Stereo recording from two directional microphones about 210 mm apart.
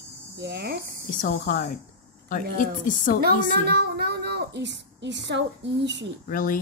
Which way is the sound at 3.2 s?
50° right (ahead or behind).